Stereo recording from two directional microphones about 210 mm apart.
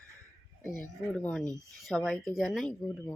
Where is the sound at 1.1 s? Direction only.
5° left (ahead or behind).